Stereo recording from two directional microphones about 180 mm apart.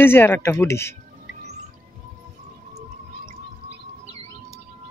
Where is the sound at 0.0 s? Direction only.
10° left (ahead or behind).